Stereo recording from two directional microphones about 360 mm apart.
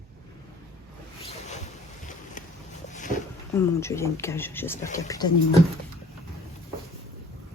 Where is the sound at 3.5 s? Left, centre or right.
Centre.